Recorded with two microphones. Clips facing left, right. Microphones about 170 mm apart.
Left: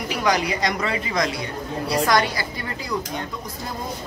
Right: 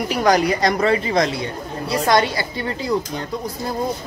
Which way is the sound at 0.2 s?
45° right (ahead or behind).